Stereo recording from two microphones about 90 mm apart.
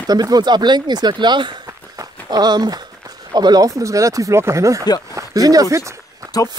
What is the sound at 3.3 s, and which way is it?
Speech, 50° right (ahead or behind).